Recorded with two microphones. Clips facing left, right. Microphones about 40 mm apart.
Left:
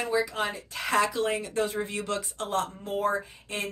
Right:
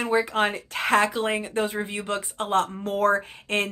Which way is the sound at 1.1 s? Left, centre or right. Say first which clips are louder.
Right 2 dB; right.